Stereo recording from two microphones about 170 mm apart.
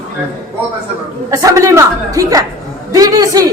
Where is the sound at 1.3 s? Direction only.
20° right (ahead or behind).